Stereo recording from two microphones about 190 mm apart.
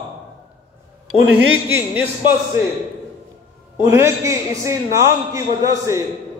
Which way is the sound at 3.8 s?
15° right (ahead or behind).